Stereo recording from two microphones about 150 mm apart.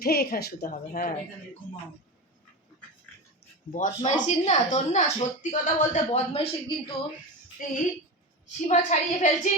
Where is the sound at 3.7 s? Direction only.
55° left (ahead or behind); by 6.9 s 40° left (ahead or behind).